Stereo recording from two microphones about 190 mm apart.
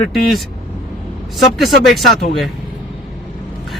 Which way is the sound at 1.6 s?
Centre (ahead or behind).